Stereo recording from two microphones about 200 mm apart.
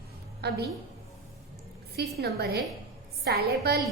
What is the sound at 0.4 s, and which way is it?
Speech, 55° right (ahead or behind).